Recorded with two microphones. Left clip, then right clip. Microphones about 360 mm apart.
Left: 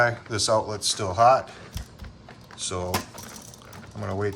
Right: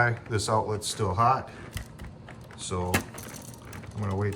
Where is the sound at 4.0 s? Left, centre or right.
Centre.